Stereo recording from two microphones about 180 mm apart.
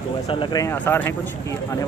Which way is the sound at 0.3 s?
25° left (ahead or behind).